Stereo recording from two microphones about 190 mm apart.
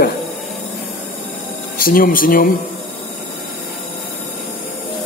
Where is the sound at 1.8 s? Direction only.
50° left (ahead or behind).